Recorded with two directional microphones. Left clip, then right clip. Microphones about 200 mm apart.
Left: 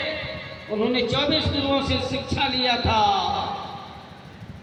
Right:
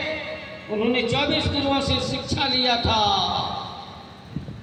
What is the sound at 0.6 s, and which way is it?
A man's voice, 35° right (ahead or behind).